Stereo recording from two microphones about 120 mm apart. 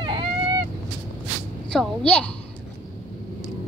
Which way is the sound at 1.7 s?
5° left (ahead or behind).